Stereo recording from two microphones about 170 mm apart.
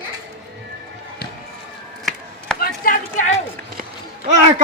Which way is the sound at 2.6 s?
55° left (ahead or behind).